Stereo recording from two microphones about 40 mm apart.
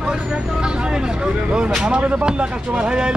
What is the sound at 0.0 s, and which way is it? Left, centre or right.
Vehicle, centre.